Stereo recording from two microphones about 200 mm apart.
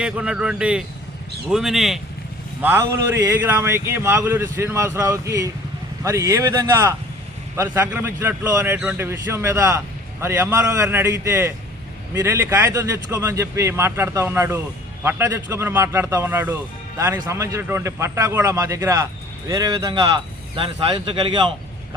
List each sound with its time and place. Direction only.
0.0 s a man's voice: 5° right (ahead or behind)
7.5 s a man's voice: 10° right (ahead or behind)